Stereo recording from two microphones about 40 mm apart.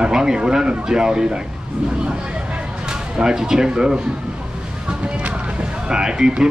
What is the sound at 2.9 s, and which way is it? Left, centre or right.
Speech, centre.